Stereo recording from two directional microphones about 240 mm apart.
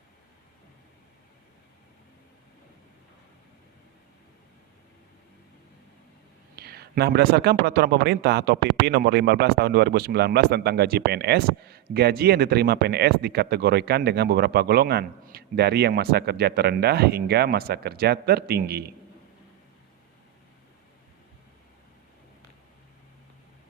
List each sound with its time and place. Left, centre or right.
6.6 s speech: right